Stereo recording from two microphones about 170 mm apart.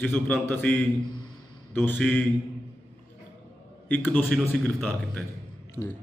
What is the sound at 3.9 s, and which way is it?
A man's voice, 10° left (ahead or behind).